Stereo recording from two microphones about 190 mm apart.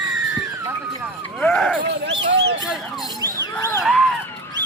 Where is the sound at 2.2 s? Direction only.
60° right (ahead or behind).